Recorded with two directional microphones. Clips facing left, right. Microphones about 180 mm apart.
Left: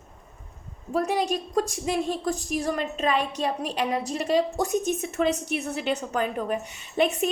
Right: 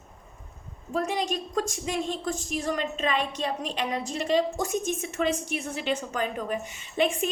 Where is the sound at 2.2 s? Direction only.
40° left (ahead or behind).